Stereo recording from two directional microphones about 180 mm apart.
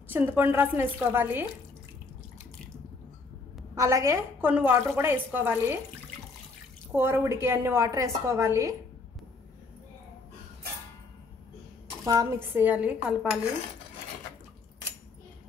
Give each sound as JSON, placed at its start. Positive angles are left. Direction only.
{"t": 0.1, "sound": "a woman's voice", "side_deg": -10}
{"t": 3.7, "sound": "a woman's voice", "side_deg": -15}
{"t": 7.0, "sound": "a woman's voice", "side_deg": -10}
{"t": 12.0, "sound": "a woman's voice", "side_deg": -20}